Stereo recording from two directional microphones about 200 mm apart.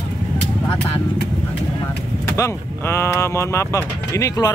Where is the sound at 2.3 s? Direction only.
15° left (ahead or behind).